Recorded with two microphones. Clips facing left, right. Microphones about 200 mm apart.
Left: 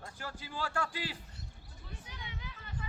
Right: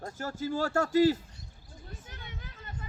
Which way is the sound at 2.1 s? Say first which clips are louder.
Right 1 dB; 50° right (ahead or behind).